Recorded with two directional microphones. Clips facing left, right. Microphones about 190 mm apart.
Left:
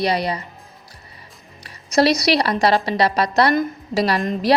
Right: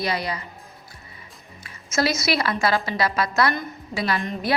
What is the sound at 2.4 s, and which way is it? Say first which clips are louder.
A woman's voice: left 5 dB; 35° left (ahead or behind).